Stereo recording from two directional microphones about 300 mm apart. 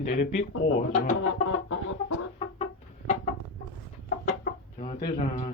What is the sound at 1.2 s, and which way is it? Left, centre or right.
Music, left.